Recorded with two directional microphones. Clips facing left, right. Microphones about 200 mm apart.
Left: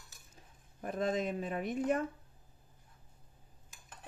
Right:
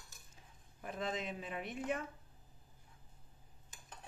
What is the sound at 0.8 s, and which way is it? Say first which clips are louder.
Speech: left 7 dB; 45° left (ahead or behind).